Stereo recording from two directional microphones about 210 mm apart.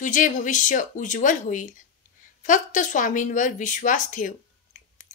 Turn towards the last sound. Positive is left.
turn(degrees=35)  # may be behind; listen again after turning